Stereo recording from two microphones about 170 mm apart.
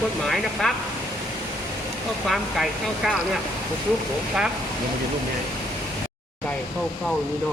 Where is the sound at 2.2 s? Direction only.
Centre (ahead or behind).